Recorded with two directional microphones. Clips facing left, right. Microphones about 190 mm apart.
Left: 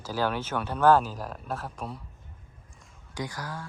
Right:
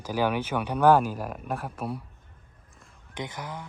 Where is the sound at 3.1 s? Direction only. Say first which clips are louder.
Even; 20° right (ahead or behind).